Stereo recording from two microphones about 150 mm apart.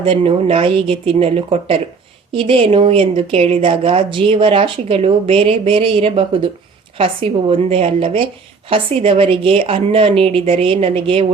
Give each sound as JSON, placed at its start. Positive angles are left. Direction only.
{"t": 0.0, "sound": "speech", "side_deg": -40}